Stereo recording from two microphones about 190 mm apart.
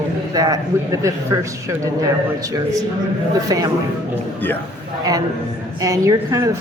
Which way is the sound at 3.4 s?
20° right (ahead or behind).